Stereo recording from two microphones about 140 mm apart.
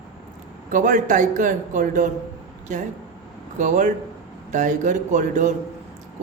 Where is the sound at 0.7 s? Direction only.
70° right (ahead or behind).